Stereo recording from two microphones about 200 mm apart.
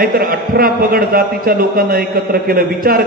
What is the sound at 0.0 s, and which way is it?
A man's voice, 45° right (ahead or behind).